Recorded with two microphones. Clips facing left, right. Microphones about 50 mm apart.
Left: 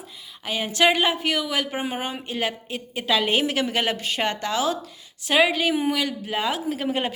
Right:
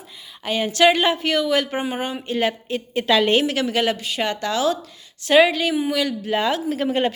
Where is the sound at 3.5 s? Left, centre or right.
Left.